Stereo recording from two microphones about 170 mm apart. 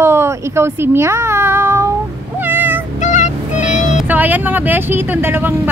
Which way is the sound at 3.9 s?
10° right (ahead or behind).